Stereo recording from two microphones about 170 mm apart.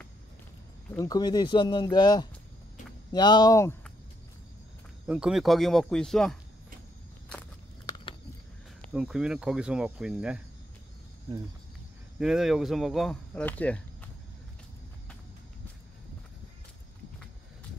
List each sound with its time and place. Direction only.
0.9 s speech: 20° left (ahead or behind)
5.0 s speech: 5° right (ahead or behind)
7.8 s a sound: 25° left (ahead or behind)
8.9 s speech: 5° right (ahead or behind)
12.2 s speech: centre (ahead or behind)